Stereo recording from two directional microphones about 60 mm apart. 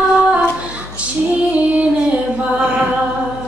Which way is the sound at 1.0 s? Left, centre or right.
Right.